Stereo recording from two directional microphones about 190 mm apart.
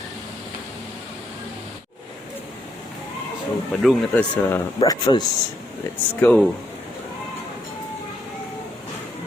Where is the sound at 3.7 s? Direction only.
5° left (ahead or behind).